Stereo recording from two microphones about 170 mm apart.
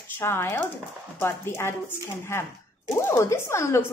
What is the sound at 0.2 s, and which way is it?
Speech, 15° left (ahead or behind).